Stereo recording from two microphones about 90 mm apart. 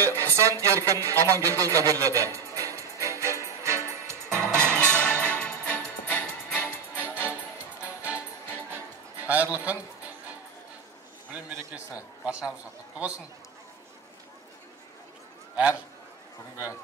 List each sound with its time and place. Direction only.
0.0 s speech: 35° right (ahead or behind)
1.2 s music: 35° right (ahead or behind)
4.7 s music: 10° left (ahead or behind)
7.8 s music: 15° right (ahead or behind)
11.7 s a man's voice: 15° right (ahead or behind)
15.5 s a man's voice: 15° right (ahead or behind)